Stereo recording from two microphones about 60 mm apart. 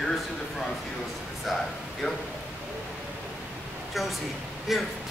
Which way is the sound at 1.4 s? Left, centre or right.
Centre.